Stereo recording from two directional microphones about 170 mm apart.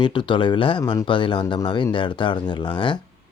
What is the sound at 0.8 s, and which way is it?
Speech, 20° left (ahead or behind).